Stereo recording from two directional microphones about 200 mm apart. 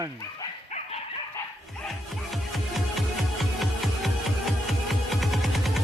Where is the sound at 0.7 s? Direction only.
30° left (ahead or behind).